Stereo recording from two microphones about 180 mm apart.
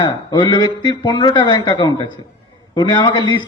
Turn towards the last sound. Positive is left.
turn(degrees=25)  # may be behind; listen again after turning